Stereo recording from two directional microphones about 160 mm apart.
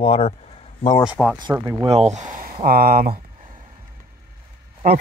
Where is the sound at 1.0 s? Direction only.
5° right (ahead or behind).